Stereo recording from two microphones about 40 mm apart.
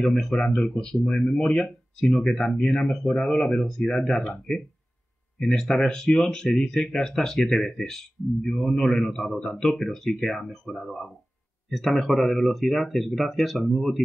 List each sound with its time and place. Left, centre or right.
0.0 s speech: centre
2.1 s speech: centre
4.1 s speech: centre
5.4 s speech: centre
5.8 s speech: centre
6.5 s speech: centre